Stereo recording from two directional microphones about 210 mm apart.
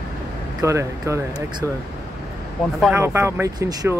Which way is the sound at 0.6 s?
15° right (ahead or behind).